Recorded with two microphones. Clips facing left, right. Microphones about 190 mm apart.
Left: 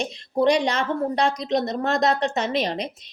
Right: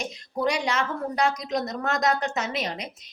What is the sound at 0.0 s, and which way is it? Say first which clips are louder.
A woman's voice: left 6 dB; 30° left (ahead or behind).